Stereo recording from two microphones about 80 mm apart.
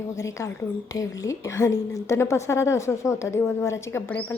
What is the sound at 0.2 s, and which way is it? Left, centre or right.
A woman's voice, left.